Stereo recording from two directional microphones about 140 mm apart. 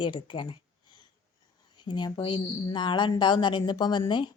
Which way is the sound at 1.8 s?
30° left (ahead or behind).